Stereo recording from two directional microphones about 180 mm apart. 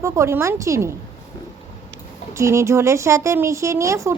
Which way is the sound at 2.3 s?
15° right (ahead or behind).